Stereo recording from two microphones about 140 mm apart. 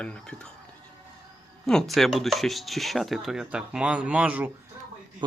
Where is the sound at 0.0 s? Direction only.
5° left (ahead or behind).